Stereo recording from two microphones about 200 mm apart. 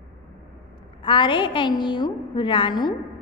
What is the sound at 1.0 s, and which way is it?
A woman's voice, 25° left (ahead or behind).